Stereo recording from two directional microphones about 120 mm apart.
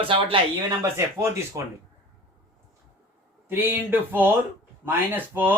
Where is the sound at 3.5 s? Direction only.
15° right (ahead or behind).